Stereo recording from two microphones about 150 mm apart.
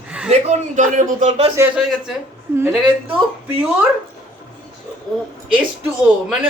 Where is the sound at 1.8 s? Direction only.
5° right (ahead or behind).